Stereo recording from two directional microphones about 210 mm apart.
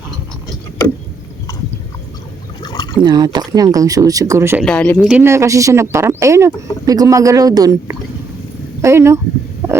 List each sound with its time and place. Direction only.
2.6 s a sound: 20° left (ahead or behind)
3.0 s speech: 20° right (ahead or behind)
4.6 s speech: 5° left (ahead or behind)
5.0 s speech: 10° right (ahead or behind)
9.6 s stomach rumble: 15° right (ahead or behind)